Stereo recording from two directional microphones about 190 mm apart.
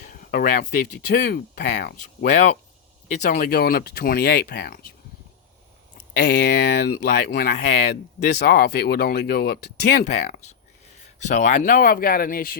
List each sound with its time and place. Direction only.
0.0 s speech: 50° left (ahead or behind)
6.1 s speech: 60° left (ahead or behind)
10.0 s speech: 35° left (ahead or behind)